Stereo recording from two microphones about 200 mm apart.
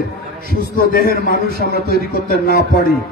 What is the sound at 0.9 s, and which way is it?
A man's voice, 45° left (ahead or behind).